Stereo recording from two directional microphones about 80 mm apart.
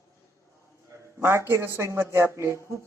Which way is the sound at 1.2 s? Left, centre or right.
Right.